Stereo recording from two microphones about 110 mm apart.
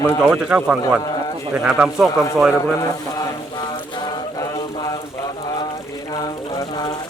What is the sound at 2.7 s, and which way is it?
Mantra, 35° left (ahead or behind).